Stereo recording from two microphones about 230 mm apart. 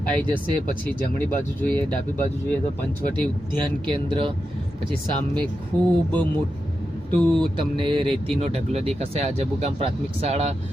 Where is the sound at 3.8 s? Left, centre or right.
Right.